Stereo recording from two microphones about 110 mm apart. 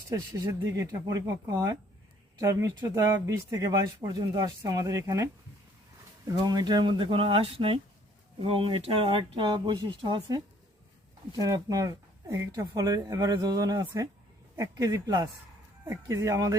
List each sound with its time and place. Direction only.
0.1 s speech: 30° right (ahead or behind); by 10.2 s 50° right (ahead or behind)
11.3 s speech: 35° right (ahead or behind)